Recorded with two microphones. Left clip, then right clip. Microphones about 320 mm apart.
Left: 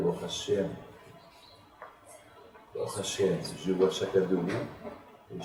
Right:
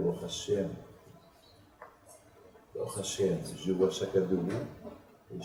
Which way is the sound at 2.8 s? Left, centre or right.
Centre.